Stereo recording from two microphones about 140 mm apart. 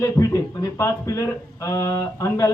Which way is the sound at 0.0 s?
20° left (ahead or behind).